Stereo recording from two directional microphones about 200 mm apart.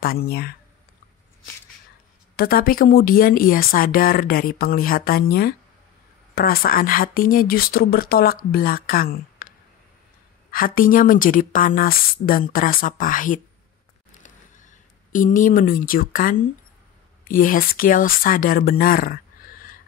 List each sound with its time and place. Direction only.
0.0 s speech: 50° left (ahead or behind)
2.3 s speech: 50° left (ahead or behind)
10.5 s speech: 45° left (ahead or behind)
14.1 s a sound: 40° left (ahead or behind)
17.2 s speech: 45° left (ahead or behind)